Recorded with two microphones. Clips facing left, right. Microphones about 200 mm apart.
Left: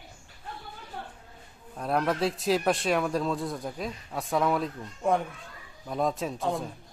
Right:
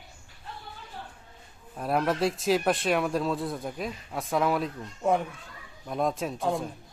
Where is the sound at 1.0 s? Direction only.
60° left (ahead or behind).